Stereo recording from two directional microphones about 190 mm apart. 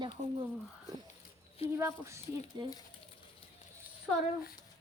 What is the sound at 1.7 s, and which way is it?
Speech, 15° right (ahead or behind).